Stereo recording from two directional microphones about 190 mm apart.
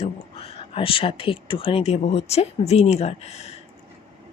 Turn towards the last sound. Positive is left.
turn(degrees=35)  # may be behind; listen again after turning